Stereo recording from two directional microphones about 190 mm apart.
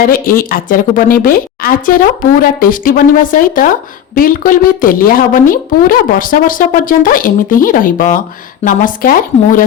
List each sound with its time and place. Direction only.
0.0 s a woman's voice: 50° left (ahead or behind)